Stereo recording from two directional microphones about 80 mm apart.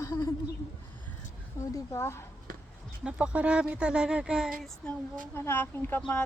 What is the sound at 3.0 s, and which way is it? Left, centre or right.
Speech, centre.